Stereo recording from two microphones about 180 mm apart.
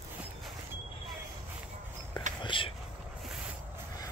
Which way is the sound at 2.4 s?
25° left (ahead or behind).